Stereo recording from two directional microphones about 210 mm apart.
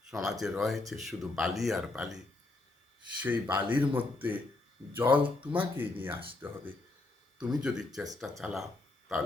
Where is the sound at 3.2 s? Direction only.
10° right (ahead or behind).